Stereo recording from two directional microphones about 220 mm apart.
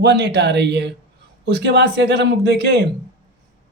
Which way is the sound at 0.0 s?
50° right (ahead or behind).